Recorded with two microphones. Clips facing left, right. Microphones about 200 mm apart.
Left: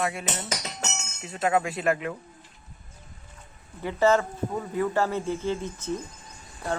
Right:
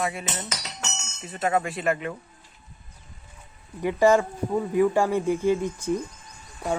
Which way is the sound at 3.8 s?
15° right (ahead or behind).